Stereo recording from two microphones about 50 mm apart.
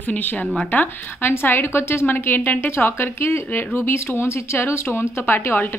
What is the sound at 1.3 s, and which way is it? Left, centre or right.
A woman's voice, left.